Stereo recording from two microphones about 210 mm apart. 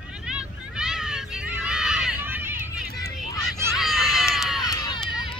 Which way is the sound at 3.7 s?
Centre (ahead or behind).